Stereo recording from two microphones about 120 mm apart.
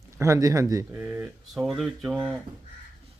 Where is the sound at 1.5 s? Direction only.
Centre (ahead or behind).